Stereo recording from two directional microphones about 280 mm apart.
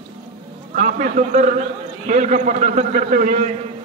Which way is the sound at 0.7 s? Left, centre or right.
Right.